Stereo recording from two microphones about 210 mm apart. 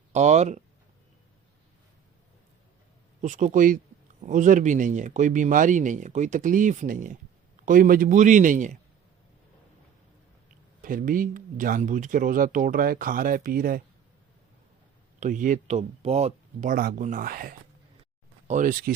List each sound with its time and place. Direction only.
0.1 s speech: 35° right (ahead or behind)
3.2 s speech: 35° right (ahead or behind)
10.8 s speech: 40° right (ahead or behind)
15.2 s speech: 40° right (ahead or behind)